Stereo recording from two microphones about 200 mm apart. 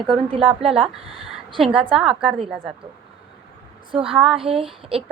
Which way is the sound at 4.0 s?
Centre (ahead or behind).